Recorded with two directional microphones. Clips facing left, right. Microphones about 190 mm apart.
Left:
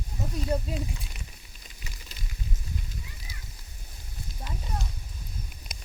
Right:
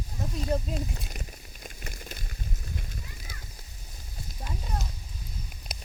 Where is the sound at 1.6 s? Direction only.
55° right (ahead or behind).